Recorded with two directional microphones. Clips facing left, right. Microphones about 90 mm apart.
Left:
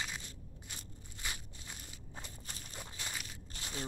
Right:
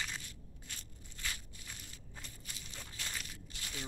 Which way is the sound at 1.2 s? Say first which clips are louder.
Even; 20° left (ahead or behind).